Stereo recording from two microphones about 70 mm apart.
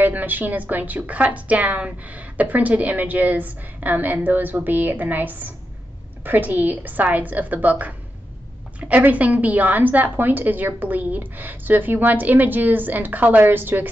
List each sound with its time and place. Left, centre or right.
0.0 s a woman's voice: right
8.8 s a woman's voice: right